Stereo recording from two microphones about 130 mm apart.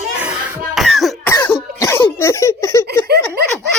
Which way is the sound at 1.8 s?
20° left (ahead or behind).